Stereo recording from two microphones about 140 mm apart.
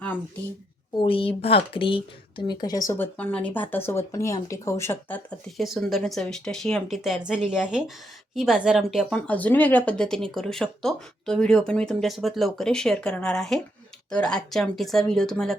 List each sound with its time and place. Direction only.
0.9 s speech: 40° left (ahead or behind); by 5.2 s 15° left (ahead or behind)
5.5 s speech: centre (ahead or behind)